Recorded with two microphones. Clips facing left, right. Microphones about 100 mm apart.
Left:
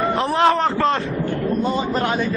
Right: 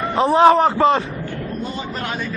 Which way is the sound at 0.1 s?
15° right (ahead or behind).